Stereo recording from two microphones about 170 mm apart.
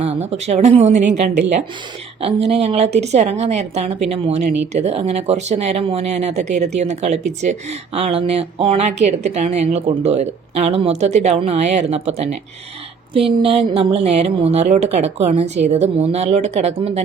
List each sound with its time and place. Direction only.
0.0 s a woman's voice: 40° right (ahead or behind)